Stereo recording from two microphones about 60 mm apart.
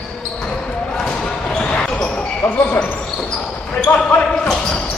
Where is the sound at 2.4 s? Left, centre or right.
Left.